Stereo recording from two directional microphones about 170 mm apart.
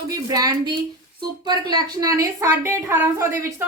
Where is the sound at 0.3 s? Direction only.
20° right (ahead or behind).